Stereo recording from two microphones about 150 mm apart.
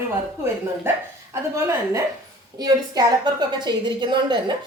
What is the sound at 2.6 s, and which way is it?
A woman's voice, 25° right (ahead or behind).